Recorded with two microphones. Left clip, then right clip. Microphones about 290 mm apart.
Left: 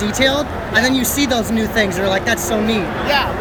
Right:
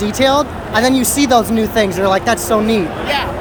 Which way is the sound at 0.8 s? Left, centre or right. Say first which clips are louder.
Right 2 dB; centre.